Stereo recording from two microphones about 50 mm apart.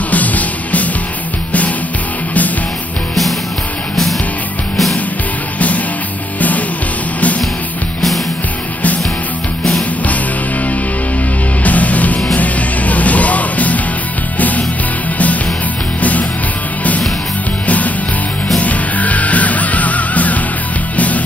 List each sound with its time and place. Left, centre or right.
0.1 s music: left
11.6 s music: left
16.0 s music: left
17.6 s music: left